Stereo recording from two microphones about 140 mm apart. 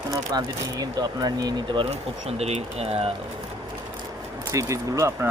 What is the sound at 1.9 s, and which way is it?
Speech, 50° right (ahead or behind).